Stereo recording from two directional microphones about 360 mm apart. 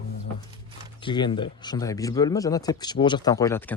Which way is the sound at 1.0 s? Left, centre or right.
Centre.